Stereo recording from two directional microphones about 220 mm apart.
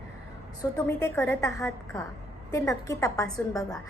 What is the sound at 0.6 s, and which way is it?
A woman's voice, 15° left (ahead or behind).